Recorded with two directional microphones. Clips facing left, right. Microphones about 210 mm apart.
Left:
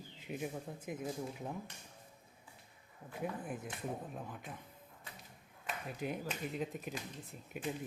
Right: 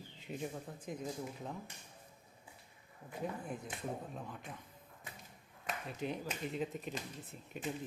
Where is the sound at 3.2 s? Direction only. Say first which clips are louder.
Left 1 dB; 5° left (ahead or behind).